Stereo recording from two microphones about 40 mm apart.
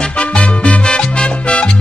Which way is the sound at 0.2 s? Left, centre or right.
Left.